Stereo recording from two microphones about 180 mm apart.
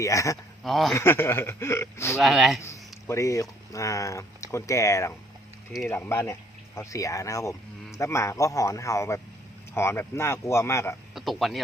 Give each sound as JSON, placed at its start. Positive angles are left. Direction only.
{"t": 0.0, "sound": "speech", "side_deg": 15}
{"t": 0.6, "sound": "speech", "side_deg": 0}
{"t": 0.9, "sound": "speech", "side_deg": 15}
{"t": 2.1, "sound": "speech", "side_deg": 0}
{"t": 2.6, "sound": "a sound", "side_deg": 15}
{"t": 3.7, "sound": "speech", "side_deg": 15}
{"t": 11.1, "sound": "speech", "side_deg": 0}